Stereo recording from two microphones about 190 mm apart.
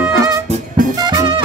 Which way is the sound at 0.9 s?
20° right (ahead or behind).